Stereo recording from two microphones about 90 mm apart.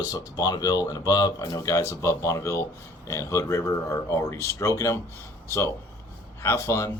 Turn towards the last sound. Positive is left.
turn(degrees=35)  # may be behind; listen again after turning